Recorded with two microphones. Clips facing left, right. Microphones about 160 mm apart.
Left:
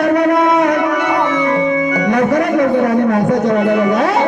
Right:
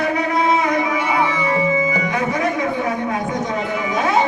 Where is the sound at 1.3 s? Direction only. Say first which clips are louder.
Left 5 dB; 55° left (ahead or behind).